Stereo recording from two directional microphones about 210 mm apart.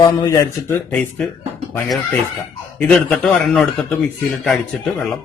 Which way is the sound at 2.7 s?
5° left (ahead or behind).